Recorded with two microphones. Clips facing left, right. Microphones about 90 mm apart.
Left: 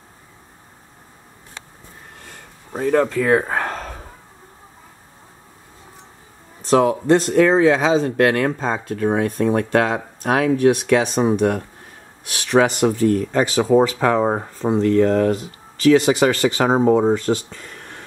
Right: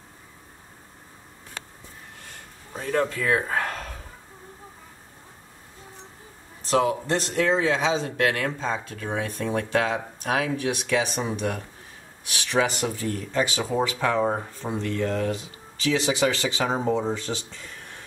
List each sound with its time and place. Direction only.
2.7 s speech: 50° left (ahead or behind); by 3.9 s 35° left (ahead or behind)
6.6 s speech: 40° left (ahead or behind)